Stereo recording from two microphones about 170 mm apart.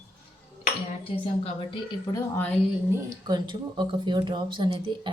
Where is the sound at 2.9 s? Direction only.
25° right (ahead or behind).